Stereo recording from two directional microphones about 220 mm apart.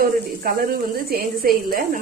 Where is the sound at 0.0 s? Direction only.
40° right (ahead or behind).